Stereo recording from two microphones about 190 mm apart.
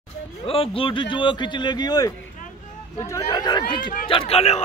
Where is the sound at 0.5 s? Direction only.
30° left (ahead or behind).